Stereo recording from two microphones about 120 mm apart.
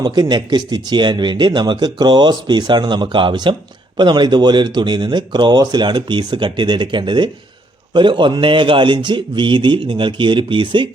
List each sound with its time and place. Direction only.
0.0 s speech: 35° right (ahead or behind)